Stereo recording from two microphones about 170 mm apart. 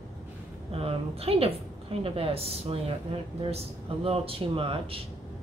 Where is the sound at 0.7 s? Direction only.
35° right (ahead or behind).